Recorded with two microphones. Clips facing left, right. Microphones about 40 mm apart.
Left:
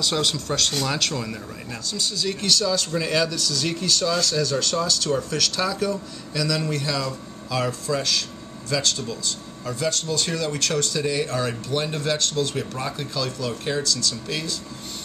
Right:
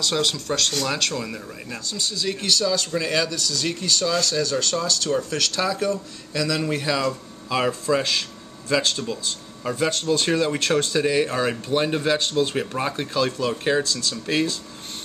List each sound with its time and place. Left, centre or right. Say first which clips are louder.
0.0 s speech: right 1 dB; centre; by 14.6 s right